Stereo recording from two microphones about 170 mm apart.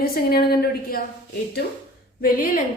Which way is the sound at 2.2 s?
60° left (ahead or behind).